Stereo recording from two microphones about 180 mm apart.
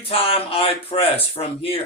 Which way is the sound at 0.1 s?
30° left (ahead or behind).